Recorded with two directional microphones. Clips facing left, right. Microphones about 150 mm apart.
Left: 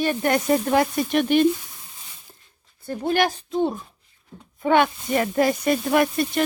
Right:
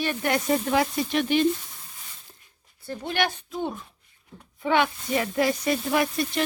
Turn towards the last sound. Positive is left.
turn(degrees=55)  # may be behind; listen again after turning